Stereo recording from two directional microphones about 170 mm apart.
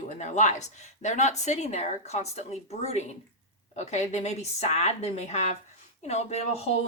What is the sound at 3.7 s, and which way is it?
Speech, 40° left (ahead or behind).